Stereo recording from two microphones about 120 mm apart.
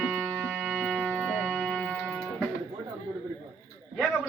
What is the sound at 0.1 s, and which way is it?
Music, 20° right (ahead or behind).